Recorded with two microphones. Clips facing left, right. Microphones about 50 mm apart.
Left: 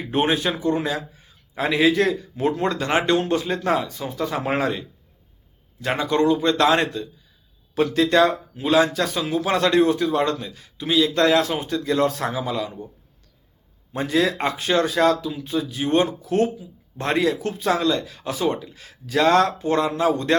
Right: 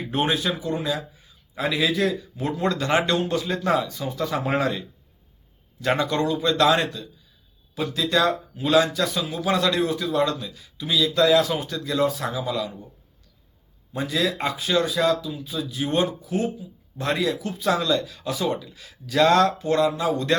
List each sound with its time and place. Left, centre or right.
0.1 s speech: left
0.3 s a man's voice: left
7.8 s speech: left
8.6 s speech: left
8.9 s a man's voice: left
11.1 s speech: left
11.5 s a man's voice: left
12.0 s speech: left
12.3 s a man's voice: left
13.9 s a man's voice: left
14.8 s speech: left
15.4 s a man's voice: left
16.2 s speech: left
17.0 s a man's voice: left